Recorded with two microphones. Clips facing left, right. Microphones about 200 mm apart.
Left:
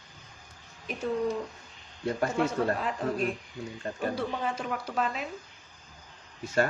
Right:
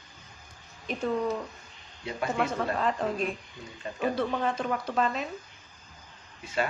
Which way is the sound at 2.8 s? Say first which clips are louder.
Right 2 dB; 5° left (ahead or behind).